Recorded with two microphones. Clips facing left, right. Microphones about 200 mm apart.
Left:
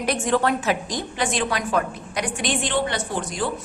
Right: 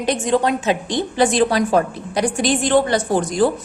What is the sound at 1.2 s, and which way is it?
A woman's voice, 35° right (ahead or behind).